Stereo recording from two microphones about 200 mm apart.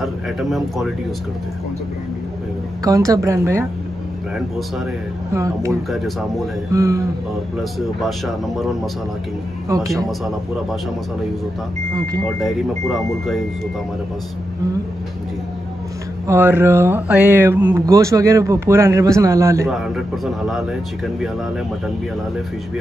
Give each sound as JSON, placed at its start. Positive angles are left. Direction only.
{"t": 0.0, "sound": "speech", "side_deg": 0}
{"t": 2.8, "sound": "speech", "side_deg": -15}
{"t": 5.3, "sound": "speech", "side_deg": -15}
{"t": 5.9, "sound": "speech", "side_deg": 0}
{"t": 6.7, "sound": "speech", "side_deg": -15}
{"t": 8.0, "sound": "speech", "side_deg": 0}
{"t": 10.0, "sound": "speech", "side_deg": 0}
{"t": 12.3, "sound": "speech", "side_deg": 0}
{"t": 16.3, "sound": "speech", "side_deg": -10}
{"t": 20.4, "sound": "speech", "side_deg": 0}